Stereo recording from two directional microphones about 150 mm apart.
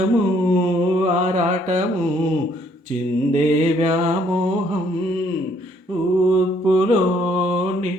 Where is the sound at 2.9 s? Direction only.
55° right (ahead or behind).